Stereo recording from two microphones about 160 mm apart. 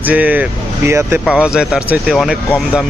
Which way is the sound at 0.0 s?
10° right (ahead or behind).